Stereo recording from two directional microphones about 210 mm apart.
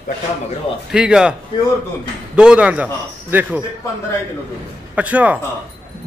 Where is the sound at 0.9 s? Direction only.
5° right (ahead or behind).